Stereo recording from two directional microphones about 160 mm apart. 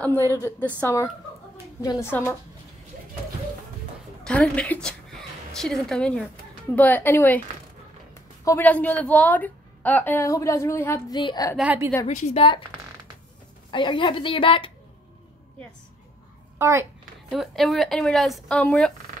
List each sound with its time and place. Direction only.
0.0 s a woman's voice: 15° left (ahead or behind)
4.2 s a woman's voice: 5° left (ahead or behind)
8.5 s a woman's voice: 10° left (ahead or behind)
11.1 s a woman's voice: 25° left (ahead or behind)
11.5 s a woman's voice: 10° right (ahead or behind)
12.1 s a woman's voice: 45° left (ahead or behind)
13.7 s a woman's voice: 30° left (ahead or behind)
16.5 s a child's voice: 15° right (ahead or behind)
17.3 s speech: centre (ahead or behind)